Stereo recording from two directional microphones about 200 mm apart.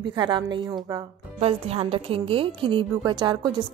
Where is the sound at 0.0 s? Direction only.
20° right (ahead or behind).